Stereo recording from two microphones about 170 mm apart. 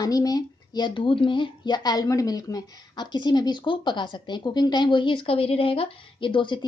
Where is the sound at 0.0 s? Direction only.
20° left (ahead or behind).